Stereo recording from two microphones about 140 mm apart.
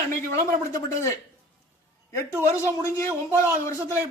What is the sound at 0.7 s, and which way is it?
Speech, 20° left (ahead or behind).